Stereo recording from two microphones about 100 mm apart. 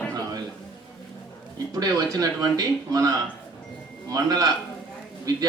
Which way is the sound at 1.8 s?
35° right (ahead or behind).